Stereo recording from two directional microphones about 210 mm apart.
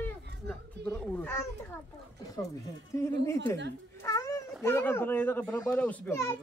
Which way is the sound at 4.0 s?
15° left (ahead or behind).